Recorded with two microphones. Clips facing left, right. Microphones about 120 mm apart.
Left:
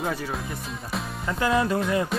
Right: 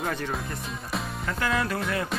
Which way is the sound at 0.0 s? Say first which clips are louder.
Left 1 dB; 5° left (ahead or behind).